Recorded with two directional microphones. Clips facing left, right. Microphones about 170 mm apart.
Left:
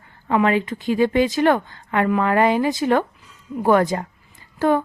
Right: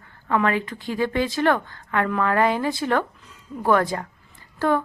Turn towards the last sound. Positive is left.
turn(degrees=15)  # may be behind; listen again after turning